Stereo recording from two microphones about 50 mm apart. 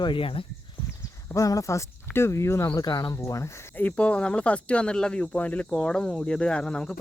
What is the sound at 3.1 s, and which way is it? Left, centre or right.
Speech, left.